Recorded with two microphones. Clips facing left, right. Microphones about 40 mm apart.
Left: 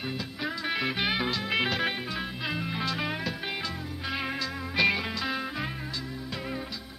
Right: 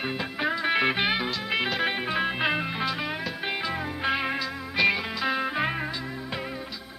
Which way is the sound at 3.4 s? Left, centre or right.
Centre.